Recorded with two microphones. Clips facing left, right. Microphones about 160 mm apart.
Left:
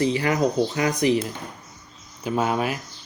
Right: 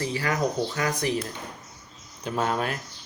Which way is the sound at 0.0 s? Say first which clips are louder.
Left 5 dB; 20° left (ahead or behind).